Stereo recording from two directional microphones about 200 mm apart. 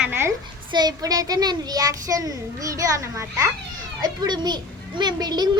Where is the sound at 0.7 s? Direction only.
20° right (ahead or behind).